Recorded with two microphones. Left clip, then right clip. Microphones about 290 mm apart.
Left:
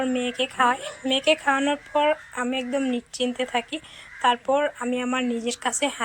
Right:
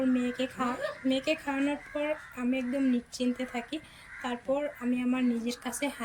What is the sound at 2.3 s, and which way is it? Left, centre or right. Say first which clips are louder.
Speech: left 6 dB; left.